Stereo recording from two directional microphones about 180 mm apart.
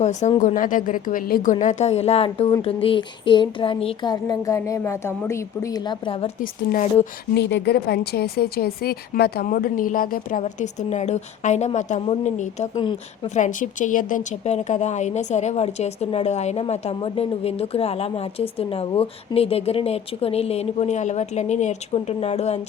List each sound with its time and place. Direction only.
0.0 s a woman's voice: 40° left (ahead or behind)
2.8 s a sound: 30° left (ahead or behind)
6.4 s a woman's voice: 50° left (ahead or behind)
7.3 s a woman's voice: 70° left (ahead or behind); by 22.6 s 35° left (ahead or behind)